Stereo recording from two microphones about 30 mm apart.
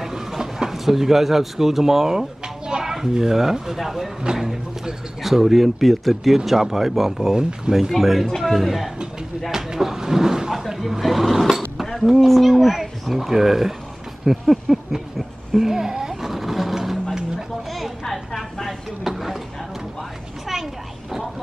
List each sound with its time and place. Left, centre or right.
0.0 s speech: centre
2.4 s children playing: right
2.8 s speech: centre
6.3 s speech: centre
7.7 s speech: right
8.0 s speech: centre
9.5 s a sound: centre
11.9 s speech: centre
14.5 s a sound: centre